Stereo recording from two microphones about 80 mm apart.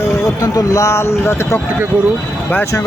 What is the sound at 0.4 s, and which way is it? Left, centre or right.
Speech, left.